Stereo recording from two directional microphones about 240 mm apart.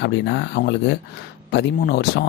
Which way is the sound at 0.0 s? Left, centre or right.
Left.